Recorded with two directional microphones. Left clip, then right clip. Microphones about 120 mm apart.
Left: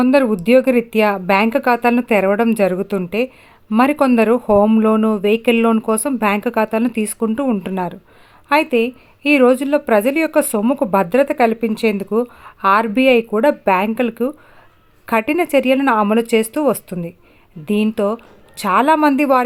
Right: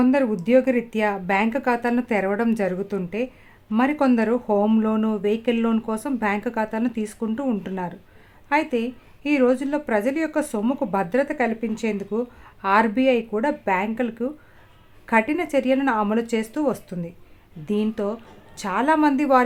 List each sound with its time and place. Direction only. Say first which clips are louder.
0.0 s a woman's voice: left 7 dB; 40° left (ahead or behind)